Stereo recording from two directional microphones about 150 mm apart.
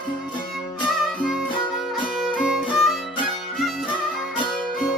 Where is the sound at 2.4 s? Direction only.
5° right (ahead or behind).